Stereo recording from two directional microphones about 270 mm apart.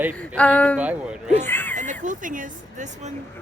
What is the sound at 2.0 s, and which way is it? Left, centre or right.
Speech, right.